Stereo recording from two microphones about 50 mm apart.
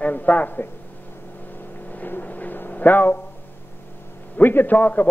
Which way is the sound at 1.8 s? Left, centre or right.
Left.